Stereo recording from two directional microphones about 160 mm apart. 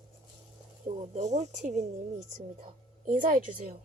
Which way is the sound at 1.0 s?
45° right (ahead or behind).